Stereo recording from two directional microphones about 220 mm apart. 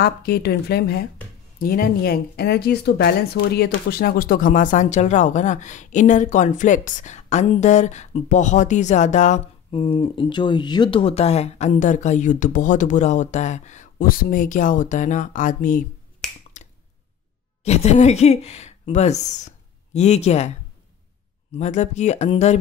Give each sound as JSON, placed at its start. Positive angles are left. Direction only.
{"t": 0.0, "sound": "speech", "side_deg": 45}
{"t": 16.2, "sound": "finger snapping", "side_deg": 0}
{"t": 17.6, "sound": "speech", "side_deg": 30}
{"t": 21.5, "sound": "speech", "side_deg": 30}